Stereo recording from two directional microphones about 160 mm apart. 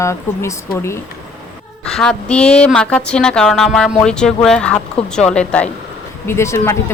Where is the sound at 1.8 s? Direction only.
5° left (ahead or behind).